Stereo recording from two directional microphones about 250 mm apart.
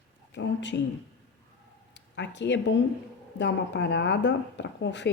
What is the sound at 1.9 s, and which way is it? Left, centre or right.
Speech, left.